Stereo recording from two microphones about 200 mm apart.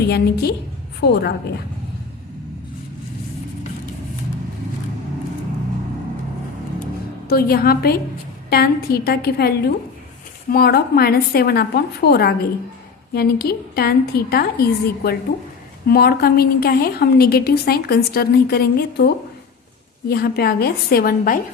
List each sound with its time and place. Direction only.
0.0 s a woman's voice: 55° left (ahead or behind)
7.3 s a woman's voice: 50° left (ahead or behind)